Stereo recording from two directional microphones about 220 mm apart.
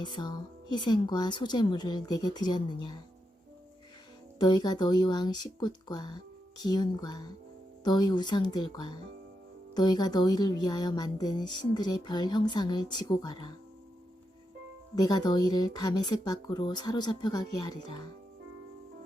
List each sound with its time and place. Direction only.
0.0 s a woman's voice: 20° left (ahead or behind)
4.4 s a woman's voice: 20° left (ahead or behind)
14.9 s speech: 20° left (ahead or behind)